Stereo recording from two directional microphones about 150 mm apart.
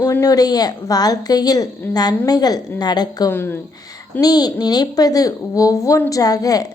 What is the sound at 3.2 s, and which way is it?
Speech, 15° left (ahead or behind).